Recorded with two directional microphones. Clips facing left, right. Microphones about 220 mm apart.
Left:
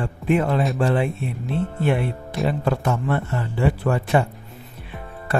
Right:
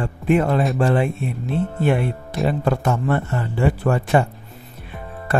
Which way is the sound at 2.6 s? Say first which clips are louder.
Right 2 dB; 50° right (ahead or behind).